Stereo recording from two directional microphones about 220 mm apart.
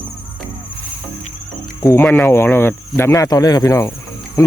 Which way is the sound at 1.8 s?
10° left (ahead or behind).